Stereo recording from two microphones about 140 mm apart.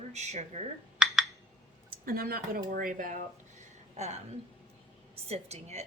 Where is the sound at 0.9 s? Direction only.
5° right (ahead or behind).